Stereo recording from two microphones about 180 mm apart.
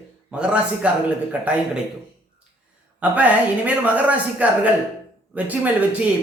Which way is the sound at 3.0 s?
10° right (ahead or behind).